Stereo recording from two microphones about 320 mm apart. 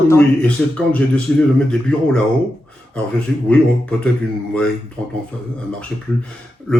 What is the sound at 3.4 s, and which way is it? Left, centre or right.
Speech, centre.